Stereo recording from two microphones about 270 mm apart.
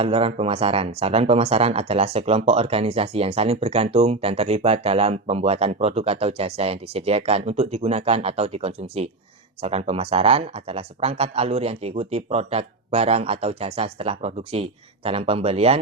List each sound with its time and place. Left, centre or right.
0.0 s speech: right